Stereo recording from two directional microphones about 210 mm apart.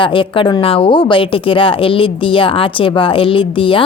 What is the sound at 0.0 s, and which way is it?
Speech, 25° left (ahead or behind).